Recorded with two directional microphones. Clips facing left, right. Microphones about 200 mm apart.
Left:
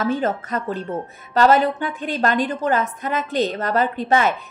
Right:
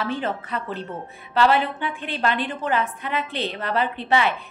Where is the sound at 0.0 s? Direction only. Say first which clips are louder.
Left 5 dB; 45° left (ahead or behind).